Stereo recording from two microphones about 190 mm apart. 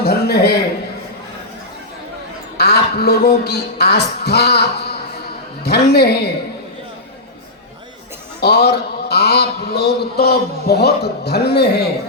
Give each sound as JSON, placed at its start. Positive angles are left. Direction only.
{"t": 0.0, "sound": "a sound", "side_deg": 55}
{"t": 2.6, "sound": "speech", "side_deg": 55}
{"t": 8.4, "sound": "a man's voice", "side_deg": 55}